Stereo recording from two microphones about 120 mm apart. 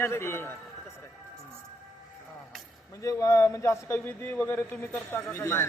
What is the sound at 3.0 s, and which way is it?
A man's voice, 25° left (ahead or behind).